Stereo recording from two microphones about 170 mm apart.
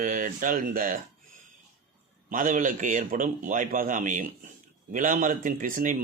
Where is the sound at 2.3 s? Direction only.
50° right (ahead or behind).